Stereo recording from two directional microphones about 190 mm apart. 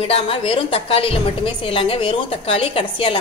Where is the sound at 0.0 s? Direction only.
30° left (ahead or behind).